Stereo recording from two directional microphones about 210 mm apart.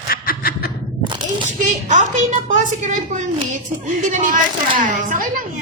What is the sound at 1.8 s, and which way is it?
Speech, 35° right (ahead or behind).